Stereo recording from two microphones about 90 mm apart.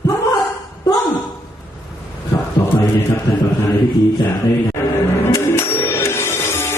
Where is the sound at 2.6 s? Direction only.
40° left (ahead or behind).